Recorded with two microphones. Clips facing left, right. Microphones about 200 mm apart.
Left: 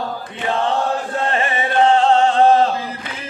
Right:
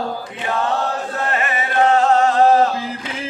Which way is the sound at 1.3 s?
30° left (ahead or behind).